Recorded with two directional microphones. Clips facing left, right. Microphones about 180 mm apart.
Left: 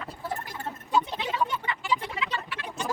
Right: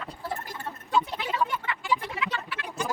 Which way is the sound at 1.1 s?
20° left (ahead or behind).